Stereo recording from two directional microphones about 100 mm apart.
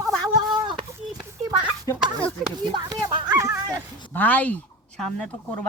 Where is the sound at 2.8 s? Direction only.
35° right (ahead or behind).